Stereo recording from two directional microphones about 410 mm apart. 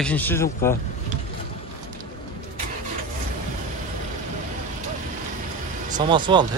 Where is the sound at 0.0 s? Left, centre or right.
Centre.